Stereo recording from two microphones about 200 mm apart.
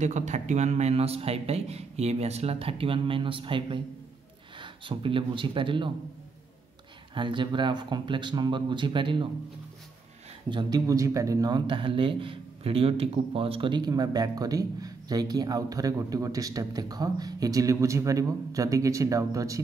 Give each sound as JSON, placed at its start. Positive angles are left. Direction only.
{"t": 0.0, "sound": "speech", "side_deg": -35}
{"t": 7.2, "sound": "speech", "side_deg": -25}
{"t": 10.5, "sound": "speech", "side_deg": -20}